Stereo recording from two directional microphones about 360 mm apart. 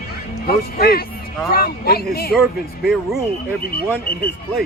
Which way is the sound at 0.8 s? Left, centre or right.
Left.